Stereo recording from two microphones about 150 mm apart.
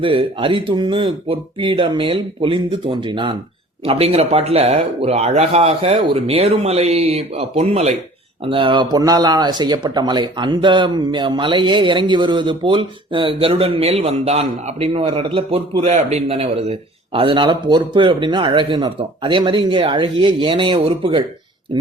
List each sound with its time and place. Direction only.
0.0 s speech: 35° right (ahead or behind)
8.4 s speech: 35° right (ahead or behind)